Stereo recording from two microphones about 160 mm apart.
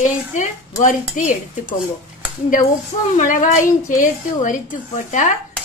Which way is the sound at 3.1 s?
55° left (ahead or behind).